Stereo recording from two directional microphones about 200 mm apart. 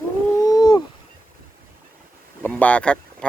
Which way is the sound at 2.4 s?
5° left (ahead or behind).